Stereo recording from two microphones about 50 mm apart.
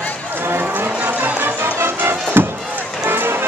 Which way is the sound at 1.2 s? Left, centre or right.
Right.